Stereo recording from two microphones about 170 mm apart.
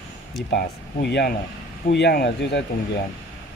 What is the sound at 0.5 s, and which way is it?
Speech, 75° left (ahead or behind).